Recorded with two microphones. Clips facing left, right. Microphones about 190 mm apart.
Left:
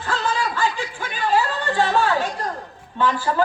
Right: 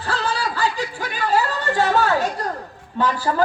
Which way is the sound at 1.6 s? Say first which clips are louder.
Right 1 dB; 40° right (ahead or behind).